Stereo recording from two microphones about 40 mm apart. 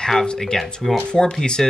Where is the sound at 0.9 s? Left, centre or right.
Left.